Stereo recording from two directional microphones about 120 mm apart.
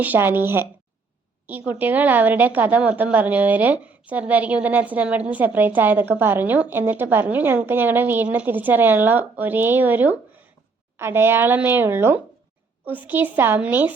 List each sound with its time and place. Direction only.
0.0 s a woman's voice: 15° right (ahead or behind)